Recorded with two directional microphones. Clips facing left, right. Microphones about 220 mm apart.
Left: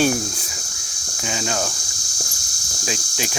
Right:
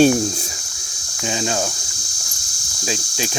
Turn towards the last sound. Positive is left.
turn(degrees=-25)  # may be behind; listen again after turning